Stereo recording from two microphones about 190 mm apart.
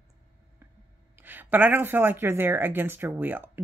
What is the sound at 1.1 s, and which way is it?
Speech, 10° right (ahead or behind).